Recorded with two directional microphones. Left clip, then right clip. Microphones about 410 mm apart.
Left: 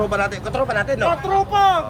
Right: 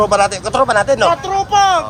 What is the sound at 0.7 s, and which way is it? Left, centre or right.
Speech, right.